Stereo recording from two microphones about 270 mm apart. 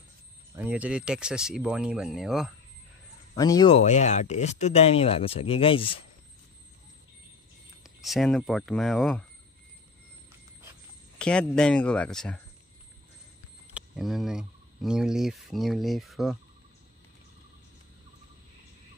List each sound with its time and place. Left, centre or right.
0.6 s speech: centre
3.3 s speech: centre
7.8 s speech: centre
11.1 s speech: centre
13.7 s speech: centre